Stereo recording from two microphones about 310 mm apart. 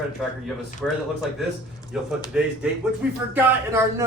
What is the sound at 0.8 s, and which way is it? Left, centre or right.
Speech, centre.